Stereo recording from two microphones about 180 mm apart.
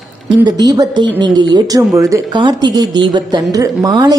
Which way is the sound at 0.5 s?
20° right (ahead or behind).